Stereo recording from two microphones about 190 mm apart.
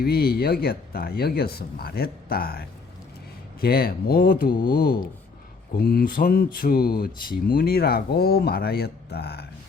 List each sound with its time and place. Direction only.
0.0 s speech: 55° left (ahead or behind)